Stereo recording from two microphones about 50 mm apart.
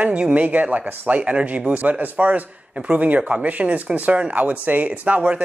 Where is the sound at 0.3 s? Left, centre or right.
Right.